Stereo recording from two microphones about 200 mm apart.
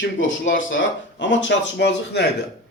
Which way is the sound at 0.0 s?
70° left (ahead or behind).